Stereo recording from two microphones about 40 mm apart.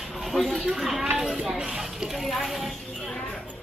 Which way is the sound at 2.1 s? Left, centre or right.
Centre.